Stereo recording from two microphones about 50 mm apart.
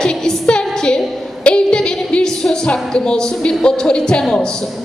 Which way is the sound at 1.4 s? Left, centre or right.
Centre.